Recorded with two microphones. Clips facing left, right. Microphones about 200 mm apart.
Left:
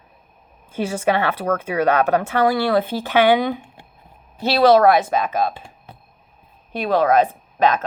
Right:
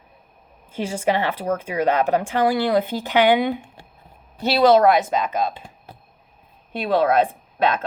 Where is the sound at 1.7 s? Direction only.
10° right (ahead or behind).